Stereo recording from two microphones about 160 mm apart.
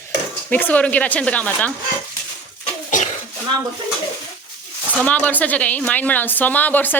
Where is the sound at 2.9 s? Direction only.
50° left (ahead or behind).